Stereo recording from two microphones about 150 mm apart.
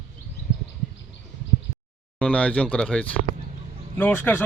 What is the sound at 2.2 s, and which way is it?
Speech, 10° left (ahead or behind).